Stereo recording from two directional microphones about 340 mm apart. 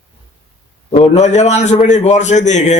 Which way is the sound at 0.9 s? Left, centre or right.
Centre.